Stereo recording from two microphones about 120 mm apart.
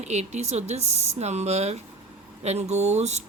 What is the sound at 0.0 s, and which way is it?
A woman's voice, 70° right (ahead or behind).